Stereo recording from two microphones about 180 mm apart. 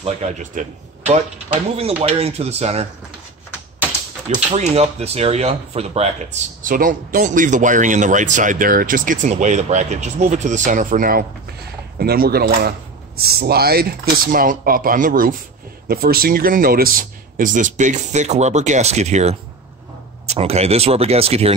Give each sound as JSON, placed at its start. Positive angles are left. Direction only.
{"t": 0.0, "sound": "speech", "side_deg": -40}
{"t": 4.5, "sound": "speech", "side_deg": -35}